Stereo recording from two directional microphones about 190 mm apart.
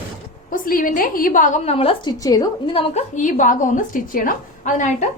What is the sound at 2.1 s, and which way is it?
A woman's voice, 20° left (ahead or behind).